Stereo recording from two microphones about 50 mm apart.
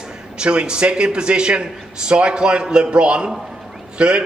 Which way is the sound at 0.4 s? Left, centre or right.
Centre.